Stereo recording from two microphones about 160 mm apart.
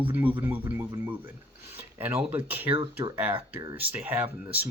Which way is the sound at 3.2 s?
10° right (ahead or behind).